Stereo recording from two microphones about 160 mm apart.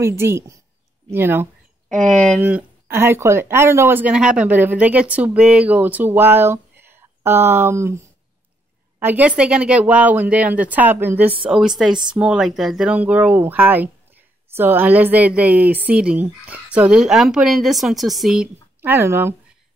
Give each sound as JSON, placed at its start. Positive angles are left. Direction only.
{"t": 0.0, "sound": "speech", "side_deg": -15}
{"t": 2.0, "sound": "speech", "side_deg": 5}
{"t": 2.4, "sound": "speech", "side_deg": -15}
{"t": 9.0, "sound": "speech", "side_deg": -10}